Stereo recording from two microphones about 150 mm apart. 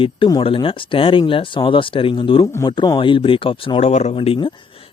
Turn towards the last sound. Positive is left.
turn(degrees=40)  # may be behind; listen again after turning